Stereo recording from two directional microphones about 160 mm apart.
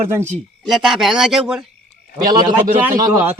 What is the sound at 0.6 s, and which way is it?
A man's voice, centre (ahead or behind).